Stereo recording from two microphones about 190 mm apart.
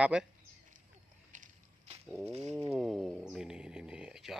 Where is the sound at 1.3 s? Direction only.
35° right (ahead or behind).